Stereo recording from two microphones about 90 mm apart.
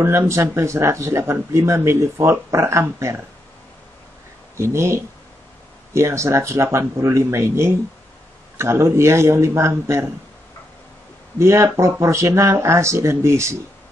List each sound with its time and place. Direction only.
0.0 s speech: 30° right (ahead or behind)
4.6 s speech: 30° right (ahead or behind)
11.3 s speech: 30° right (ahead or behind)